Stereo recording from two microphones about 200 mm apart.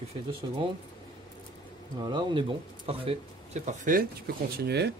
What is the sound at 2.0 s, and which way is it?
Speech, 20° right (ahead or behind).